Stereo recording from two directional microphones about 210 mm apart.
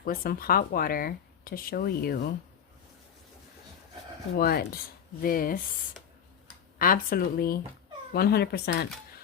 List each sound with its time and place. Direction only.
0.0 s speech: 45° left (ahead or behind)
4.4 s speech: 45° left (ahead or behind)
6.7 s speech: 40° left (ahead or behind)